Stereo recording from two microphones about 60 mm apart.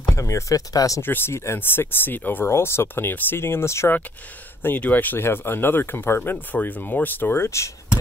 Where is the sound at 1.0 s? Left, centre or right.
Left.